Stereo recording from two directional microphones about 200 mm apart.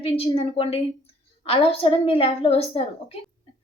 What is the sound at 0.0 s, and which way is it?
A woman's voice, 30° left (ahead or behind).